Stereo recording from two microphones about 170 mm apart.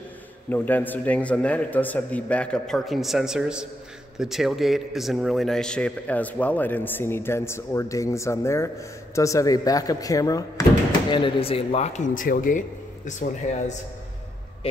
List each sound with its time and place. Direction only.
0.5 s a man's voice: 10° left (ahead or behind); by 13.7 s 45° left (ahead or behind)